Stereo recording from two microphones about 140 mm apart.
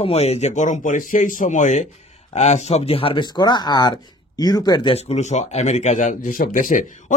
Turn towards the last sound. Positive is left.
turn(degrees=60)  # may be behind; listen again after turning